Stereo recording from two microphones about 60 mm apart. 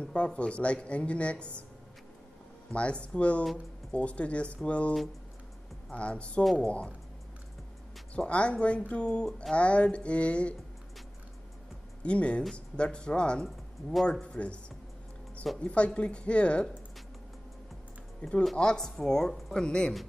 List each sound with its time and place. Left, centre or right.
0.0 s speech: centre
2.7 s speech: centre
8.1 s speech: centre
12.0 s speech: centre
15.6 s speech: centre
18.2 s speech: left